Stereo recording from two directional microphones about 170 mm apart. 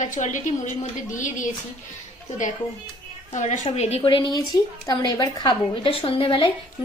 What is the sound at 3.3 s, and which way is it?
A woman's voice, 45° left (ahead or behind).